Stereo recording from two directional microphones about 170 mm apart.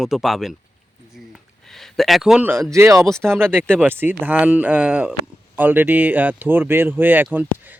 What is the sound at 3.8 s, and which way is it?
Speech, 10° right (ahead or behind).